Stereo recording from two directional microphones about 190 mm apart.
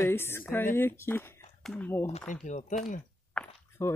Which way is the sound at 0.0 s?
15° left (ahead or behind).